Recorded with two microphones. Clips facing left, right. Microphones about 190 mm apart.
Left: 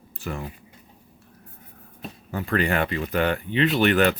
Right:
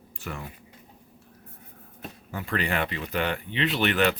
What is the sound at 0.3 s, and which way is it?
Speech, 35° left (ahead or behind).